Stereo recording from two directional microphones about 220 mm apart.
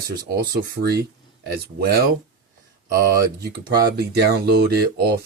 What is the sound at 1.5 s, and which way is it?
Speech, 45° right (ahead or behind).